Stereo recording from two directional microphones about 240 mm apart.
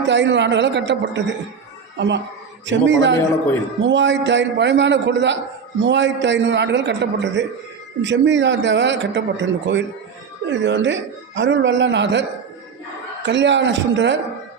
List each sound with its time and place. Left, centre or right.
0.1 s a man's voice: right
13.2 s a man's voice: right